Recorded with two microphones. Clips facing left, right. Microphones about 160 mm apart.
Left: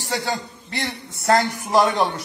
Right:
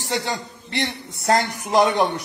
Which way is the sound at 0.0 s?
20° right (ahead or behind).